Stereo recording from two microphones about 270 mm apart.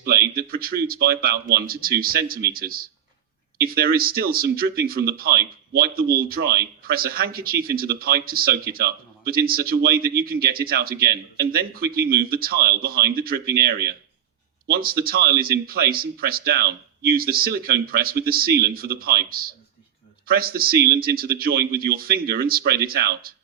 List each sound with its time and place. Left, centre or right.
0.0 s speech: right